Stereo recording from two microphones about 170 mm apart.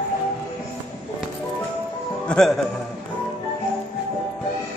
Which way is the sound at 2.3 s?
5° left (ahead or behind).